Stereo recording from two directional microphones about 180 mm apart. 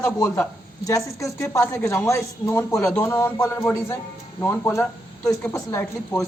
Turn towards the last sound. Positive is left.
turn(degrees=15)  # may be behind; listen again after turning